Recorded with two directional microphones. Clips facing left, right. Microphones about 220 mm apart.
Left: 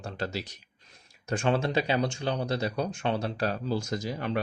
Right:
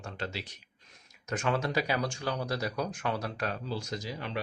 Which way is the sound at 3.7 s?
45° left (ahead or behind).